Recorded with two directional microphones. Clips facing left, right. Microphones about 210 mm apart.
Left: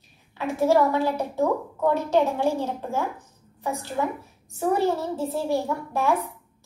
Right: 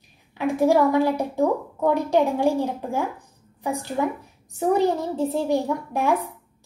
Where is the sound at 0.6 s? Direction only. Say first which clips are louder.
Right 2 dB; 15° right (ahead or behind).